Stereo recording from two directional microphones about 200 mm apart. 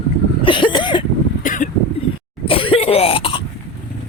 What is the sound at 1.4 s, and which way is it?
Vehicle, 40° left (ahead or behind).